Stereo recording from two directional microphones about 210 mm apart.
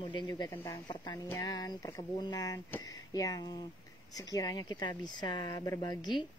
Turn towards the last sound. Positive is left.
turn(degrees=20)  # may be behind; listen again after turning